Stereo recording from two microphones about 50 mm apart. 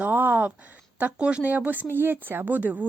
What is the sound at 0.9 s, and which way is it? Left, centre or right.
Speech, right.